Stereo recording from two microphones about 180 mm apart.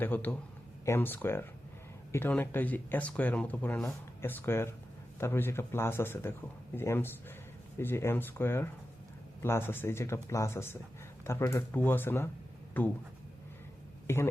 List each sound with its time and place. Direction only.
0.0 s speech: 10° left (ahead or behind)
14.1 s speech: 15° left (ahead or behind)